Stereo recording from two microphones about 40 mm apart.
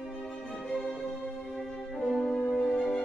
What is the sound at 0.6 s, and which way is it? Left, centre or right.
Music, centre.